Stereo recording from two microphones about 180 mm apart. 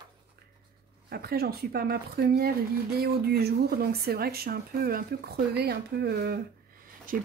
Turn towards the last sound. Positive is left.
turn(degrees=-50)  # may be behind; listen again after turning